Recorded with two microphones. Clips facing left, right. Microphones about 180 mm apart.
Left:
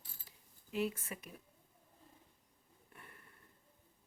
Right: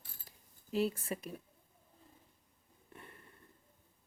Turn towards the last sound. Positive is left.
turn(degrees=-25)  # may be behind; listen again after turning